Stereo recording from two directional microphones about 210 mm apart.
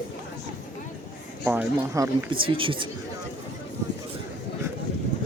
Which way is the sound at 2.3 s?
25° right (ahead or behind).